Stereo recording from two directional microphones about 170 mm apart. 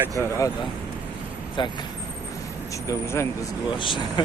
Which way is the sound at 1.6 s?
25° left (ahead or behind).